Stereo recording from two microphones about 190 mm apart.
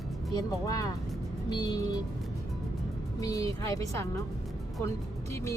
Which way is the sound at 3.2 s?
20° left (ahead or behind).